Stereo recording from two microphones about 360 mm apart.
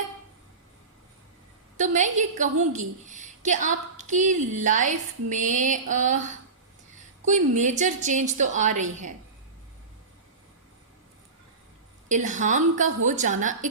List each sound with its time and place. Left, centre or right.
1.7 s a woman's voice: centre
7.3 s a woman's voice: centre
12.0 s a woman's voice: right